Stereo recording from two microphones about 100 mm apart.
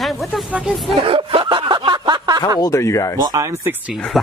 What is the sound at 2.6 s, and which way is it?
Speech, 35° left (ahead or behind).